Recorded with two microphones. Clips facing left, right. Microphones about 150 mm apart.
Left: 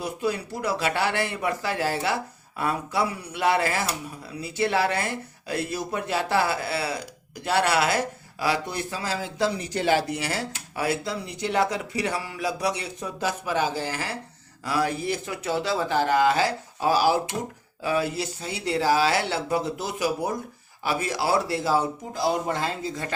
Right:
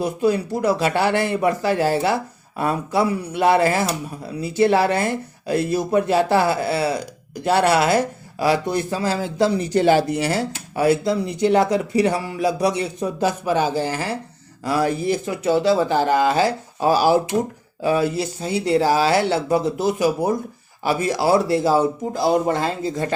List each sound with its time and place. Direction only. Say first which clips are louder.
0.0 s speech: right 8 dB; 40° right (ahead or behind)
22.1 s speech: right 5 dB; 55° right (ahead or behind)